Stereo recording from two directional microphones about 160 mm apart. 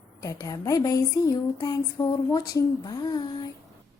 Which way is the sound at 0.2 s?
20° left (ahead or behind).